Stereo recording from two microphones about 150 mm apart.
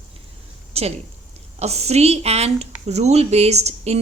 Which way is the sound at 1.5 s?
45° right (ahead or behind).